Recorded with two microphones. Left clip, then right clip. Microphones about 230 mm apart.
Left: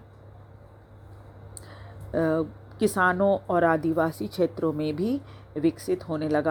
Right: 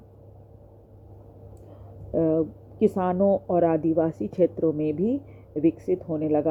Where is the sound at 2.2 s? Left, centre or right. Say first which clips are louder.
Right 2 dB; left.